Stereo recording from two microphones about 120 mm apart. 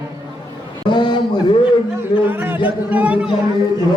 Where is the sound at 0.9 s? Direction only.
40° left (ahead or behind).